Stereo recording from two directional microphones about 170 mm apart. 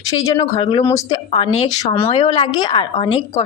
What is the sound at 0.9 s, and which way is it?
Speech, 20° left (ahead or behind).